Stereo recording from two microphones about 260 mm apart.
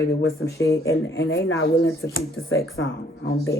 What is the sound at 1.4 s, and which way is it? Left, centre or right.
Speech, left.